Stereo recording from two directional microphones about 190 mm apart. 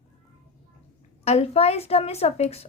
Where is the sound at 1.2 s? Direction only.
35° left (ahead or behind).